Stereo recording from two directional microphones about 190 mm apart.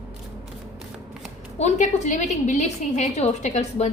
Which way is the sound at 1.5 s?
35° left (ahead or behind).